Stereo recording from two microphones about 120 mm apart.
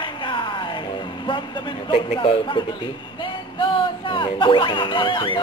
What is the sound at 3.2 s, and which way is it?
Music, 45° left (ahead or behind).